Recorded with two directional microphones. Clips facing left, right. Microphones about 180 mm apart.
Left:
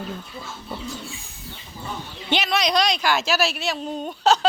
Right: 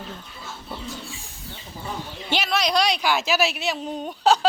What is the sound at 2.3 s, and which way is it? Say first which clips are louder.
A woman's voice: left 1 dB; 5° right (ahead or behind).